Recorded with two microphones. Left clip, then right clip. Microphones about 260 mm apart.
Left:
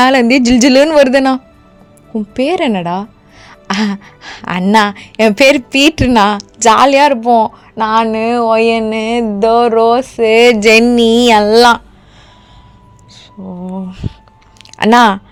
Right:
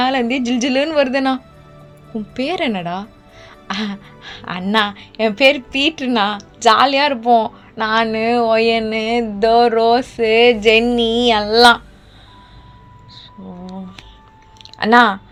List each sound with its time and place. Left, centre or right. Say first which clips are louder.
0.0 s a woman's voice: left 9 dB; left
13.4 s speech: left 9 dB; left
14.8 s a woman's voice: left 4 dB; left